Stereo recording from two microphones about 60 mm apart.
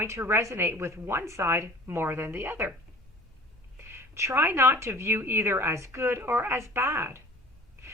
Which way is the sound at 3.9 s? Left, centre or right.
Right.